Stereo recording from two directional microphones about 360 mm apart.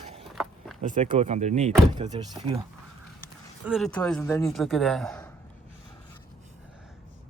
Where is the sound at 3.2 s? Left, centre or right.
Centre.